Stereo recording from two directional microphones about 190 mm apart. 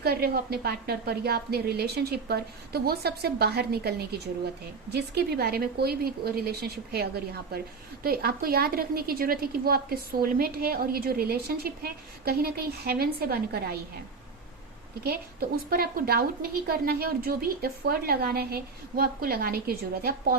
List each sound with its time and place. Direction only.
0.0 s a woman's voice: 55° right (ahead or behind)
15.0 s a woman's voice: 55° right (ahead or behind)